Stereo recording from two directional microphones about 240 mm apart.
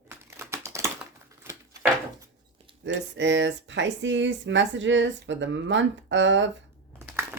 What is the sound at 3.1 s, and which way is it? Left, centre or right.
Speech, right.